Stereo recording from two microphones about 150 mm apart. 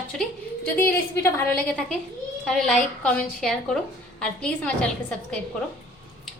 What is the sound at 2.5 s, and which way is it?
Speech, 5° left (ahead or behind).